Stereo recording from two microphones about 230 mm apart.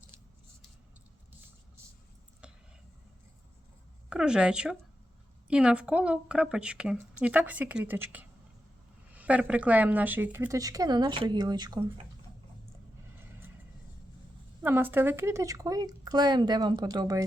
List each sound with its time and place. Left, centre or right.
2.4 s a sound: centre
4.1 s a woman's voice: centre
13.1 s vehicle: centre
14.6 s speech: centre